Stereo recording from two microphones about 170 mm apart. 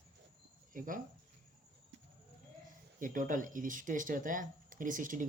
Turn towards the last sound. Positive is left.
turn(degrees=-50)  # may be behind; listen again after turning